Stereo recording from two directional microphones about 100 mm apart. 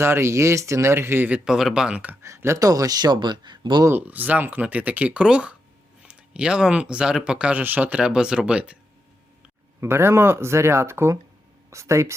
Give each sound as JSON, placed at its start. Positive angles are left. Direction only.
{"t": 0.0, "sound": "speech", "side_deg": -25}
{"t": 1.5, "sound": "speech", "side_deg": -5}
{"t": 2.2, "sound": "speech", "side_deg": -30}
{"t": 3.8, "sound": "speech", "side_deg": -20}
{"t": 9.8, "sound": "speech", "side_deg": -25}